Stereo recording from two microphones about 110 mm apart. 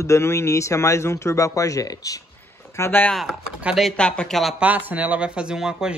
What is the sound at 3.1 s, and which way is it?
Speech, centre (ahead or behind).